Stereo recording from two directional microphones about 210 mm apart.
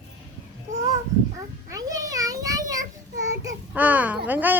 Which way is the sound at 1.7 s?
15° right (ahead or behind).